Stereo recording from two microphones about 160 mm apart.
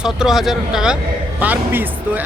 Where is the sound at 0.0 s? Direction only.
5° right (ahead or behind).